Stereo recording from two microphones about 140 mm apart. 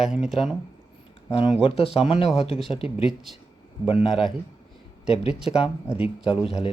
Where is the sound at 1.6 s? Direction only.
45° left (ahead or behind).